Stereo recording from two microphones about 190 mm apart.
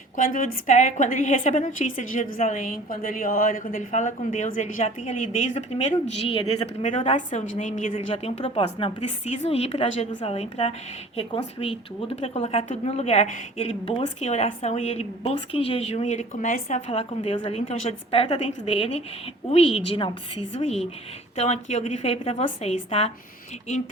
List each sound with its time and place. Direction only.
0.2 s a woman's voice: 45° left (ahead or behind)
7.9 s speech: 30° left (ahead or behind)